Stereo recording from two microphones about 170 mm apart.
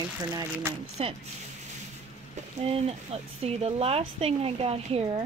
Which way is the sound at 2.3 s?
35° right (ahead or behind).